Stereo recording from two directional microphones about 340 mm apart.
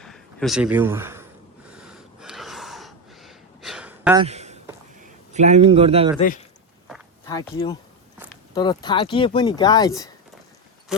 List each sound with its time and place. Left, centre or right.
0.0 s a sound: centre
4.9 s a man's voice: right
6.1 s speech: left
7.5 s speech: centre